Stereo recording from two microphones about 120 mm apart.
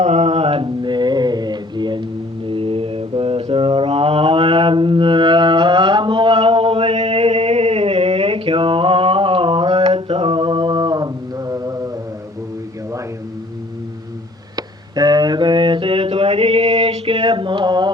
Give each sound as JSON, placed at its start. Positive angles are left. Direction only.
{"t": 0.0, "sound": "mantra", "side_deg": -65}
{"t": 3.5, "sound": "music", "side_deg": -50}
{"t": 14.5, "sound": "a sound", "side_deg": -35}